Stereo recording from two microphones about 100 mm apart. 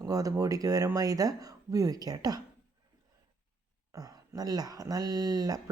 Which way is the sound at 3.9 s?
40° right (ahead or behind).